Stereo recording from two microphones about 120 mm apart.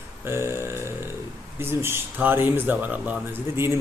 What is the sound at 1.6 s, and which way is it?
A man's voice, 20° right (ahead or behind).